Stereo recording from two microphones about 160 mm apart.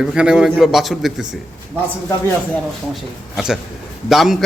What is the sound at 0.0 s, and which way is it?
A man's voice, 5° right (ahead or behind).